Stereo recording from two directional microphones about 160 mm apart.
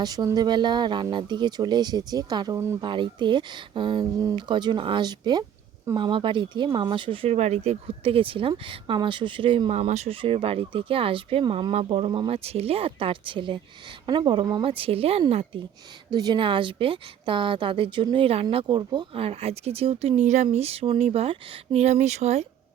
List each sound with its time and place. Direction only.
0.0 s speech: 25° right (ahead or behind)
4.2 s speech: 20° right (ahead or behind); by 15.6 s 40° right (ahead or behind)
16.1 s speech: 25° right (ahead or behind); by 22.4 s 45° right (ahead or behind)